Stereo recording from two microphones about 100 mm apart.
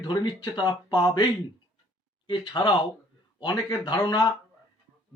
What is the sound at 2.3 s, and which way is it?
Speech, 50° left (ahead or behind).